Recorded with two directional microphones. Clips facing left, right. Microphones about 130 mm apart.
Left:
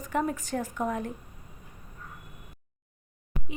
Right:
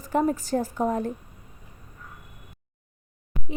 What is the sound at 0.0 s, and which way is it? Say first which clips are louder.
A woman's voice: right 5 dB; 35° right (ahead or behind).